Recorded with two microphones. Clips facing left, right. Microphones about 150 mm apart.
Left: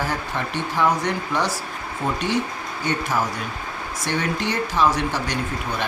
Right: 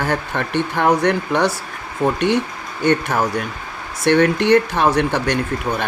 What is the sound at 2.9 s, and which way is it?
Speech, 60° right (ahead or behind).